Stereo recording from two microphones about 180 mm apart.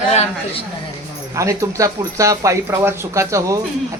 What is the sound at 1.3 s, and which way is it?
Speech, 15° right (ahead or behind).